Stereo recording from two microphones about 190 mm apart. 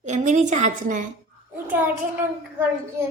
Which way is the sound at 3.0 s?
15° right (ahead or behind).